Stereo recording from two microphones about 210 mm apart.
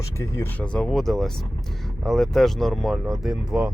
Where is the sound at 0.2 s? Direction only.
10° left (ahead or behind).